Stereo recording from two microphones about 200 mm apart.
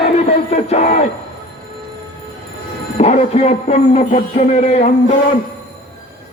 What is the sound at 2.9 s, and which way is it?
A man's voice, 35° left (ahead or behind).